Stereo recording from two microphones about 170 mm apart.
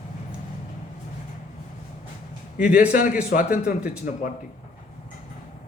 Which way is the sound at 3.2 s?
55° left (ahead or behind).